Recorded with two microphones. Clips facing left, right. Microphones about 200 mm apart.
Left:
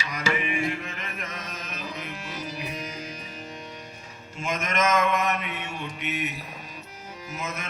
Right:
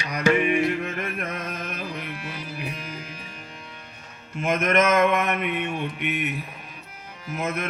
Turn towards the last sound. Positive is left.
turn(degrees=-55)  # may be behind; listen again after turning